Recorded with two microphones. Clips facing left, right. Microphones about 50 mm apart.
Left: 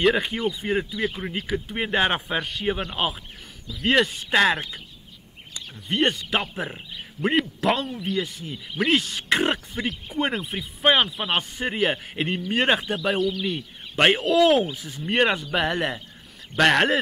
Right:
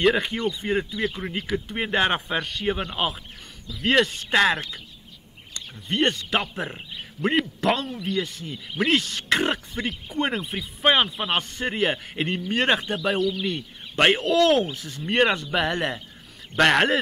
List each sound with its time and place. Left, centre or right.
0.0 s speech: centre